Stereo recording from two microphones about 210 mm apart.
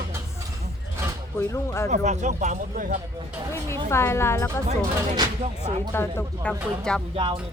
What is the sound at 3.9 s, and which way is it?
Speech, 10° left (ahead or behind).